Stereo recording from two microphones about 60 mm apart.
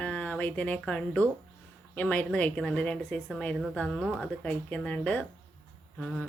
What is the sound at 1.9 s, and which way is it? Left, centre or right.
Speech, left.